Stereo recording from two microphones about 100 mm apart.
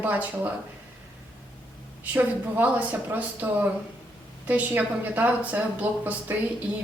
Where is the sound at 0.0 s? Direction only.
15° right (ahead or behind).